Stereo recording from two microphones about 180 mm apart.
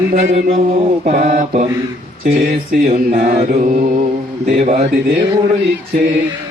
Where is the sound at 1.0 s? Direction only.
40° right (ahead or behind).